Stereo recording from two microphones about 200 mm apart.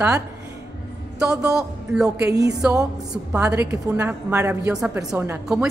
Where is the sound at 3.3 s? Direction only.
10° right (ahead or behind).